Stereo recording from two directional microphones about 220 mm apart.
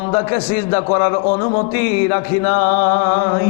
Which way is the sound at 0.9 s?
20° left (ahead or behind).